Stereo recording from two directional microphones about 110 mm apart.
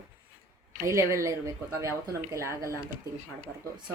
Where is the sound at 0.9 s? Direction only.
25° right (ahead or behind).